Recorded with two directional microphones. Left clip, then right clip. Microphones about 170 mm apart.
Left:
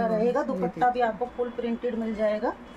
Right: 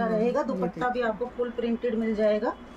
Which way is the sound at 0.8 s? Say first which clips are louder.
Left 6 dB; 25° right (ahead or behind).